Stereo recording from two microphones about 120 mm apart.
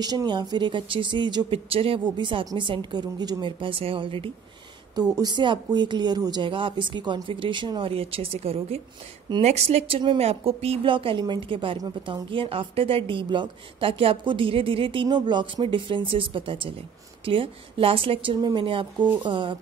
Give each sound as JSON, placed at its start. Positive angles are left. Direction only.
{"t": 0.0, "sound": "speech", "side_deg": -35}
{"t": 4.9, "sound": "a woman's voice", "side_deg": -35}